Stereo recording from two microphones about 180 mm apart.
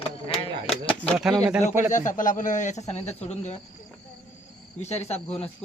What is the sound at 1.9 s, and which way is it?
Speech, 45° left (ahead or behind).